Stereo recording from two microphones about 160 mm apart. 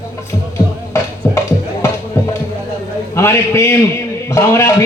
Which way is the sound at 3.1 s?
15° left (ahead or behind).